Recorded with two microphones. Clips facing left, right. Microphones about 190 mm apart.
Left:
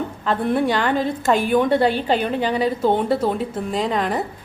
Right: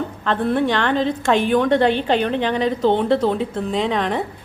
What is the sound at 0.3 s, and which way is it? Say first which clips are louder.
A woman's voice: right 1 dB; 10° left (ahead or behind).